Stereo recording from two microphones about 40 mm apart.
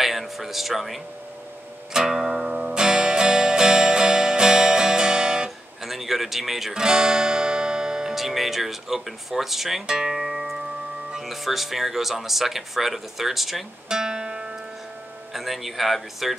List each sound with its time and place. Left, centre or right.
0.0 s speech: centre
2.0 s music: centre
5.9 s speech: centre
6.7 s music: centre
8.1 s speech: centre
9.8 s speech: centre
10.1 s music: centre
11.2 s speech: centre
13.8 s music: centre
15.3 s speech: centre